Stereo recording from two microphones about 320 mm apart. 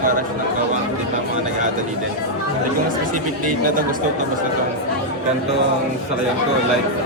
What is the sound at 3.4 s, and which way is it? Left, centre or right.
Speech, right.